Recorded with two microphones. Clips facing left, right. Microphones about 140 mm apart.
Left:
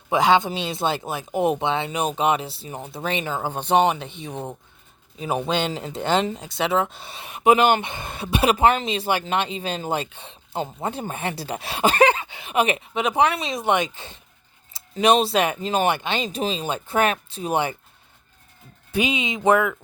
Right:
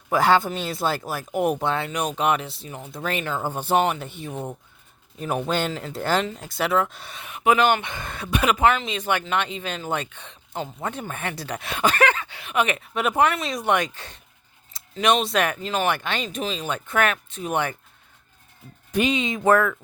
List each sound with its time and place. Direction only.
0.1 s speech: 20° left (ahead or behind)
3.0 s speech: 10° left (ahead or behind)
3.5 s speech: 10° right (ahead or behind)
3.8 s speech: 20° left (ahead or behind)
5.5 s speech: 20° left (ahead or behind)
18.9 s speech: 5° left (ahead or behind)
19.2 s speech: 15° left (ahead or behind)